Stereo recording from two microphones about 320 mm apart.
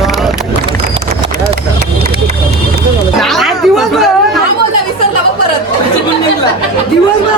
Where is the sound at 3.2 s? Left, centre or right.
Centre.